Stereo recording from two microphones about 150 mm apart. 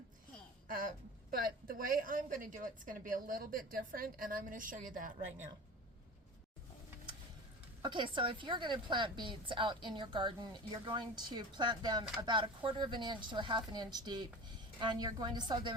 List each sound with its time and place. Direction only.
0.7 s a sound: 65° right (ahead or behind)
1.6 s a woman's voice: 70° right (ahead or behind)
7.8 s a woman's voice: 35° right (ahead or behind)